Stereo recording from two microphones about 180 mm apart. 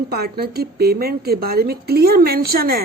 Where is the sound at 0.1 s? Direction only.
60° right (ahead or behind).